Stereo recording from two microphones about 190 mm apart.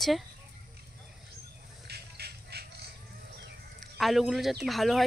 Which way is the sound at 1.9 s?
60° right (ahead or behind).